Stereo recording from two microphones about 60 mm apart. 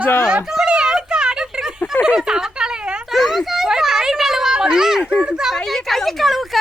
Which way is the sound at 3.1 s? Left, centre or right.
Centre.